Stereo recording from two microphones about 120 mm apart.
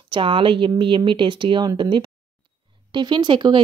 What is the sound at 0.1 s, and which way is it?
A woman's voice, 45° right (ahead or behind).